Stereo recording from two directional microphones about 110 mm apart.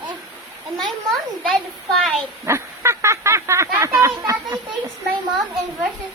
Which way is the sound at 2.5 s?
25° right (ahead or behind).